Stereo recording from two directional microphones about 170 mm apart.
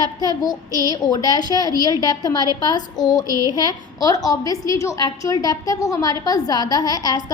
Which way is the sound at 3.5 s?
20° left (ahead or behind).